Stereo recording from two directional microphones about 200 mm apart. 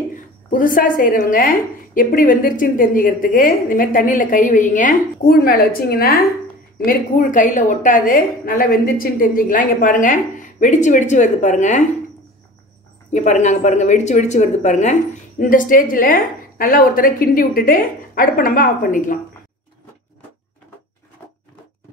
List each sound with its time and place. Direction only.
0.1 s a woman's voice: 45° left (ahead or behind)
13.1 s a woman's voice: 35° left (ahead or behind)